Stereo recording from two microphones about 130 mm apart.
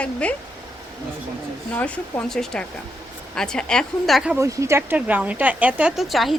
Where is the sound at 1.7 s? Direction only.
10° left (ahead or behind).